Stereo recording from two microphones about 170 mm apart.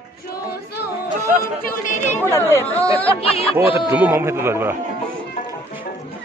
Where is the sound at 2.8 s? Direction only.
35° left (ahead or behind).